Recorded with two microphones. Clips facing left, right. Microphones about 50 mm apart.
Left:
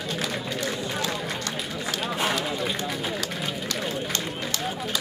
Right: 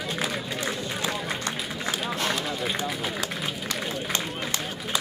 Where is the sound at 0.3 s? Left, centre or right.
Centre.